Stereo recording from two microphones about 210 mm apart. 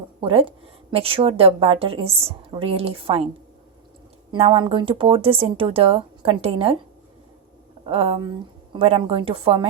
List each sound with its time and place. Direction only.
0.2 s a woman's voice: 25° right (ahead or behind)
4.3 s speech: 25° right (ahead or behind)
7.9 s speech: 25° right (ahead or behind)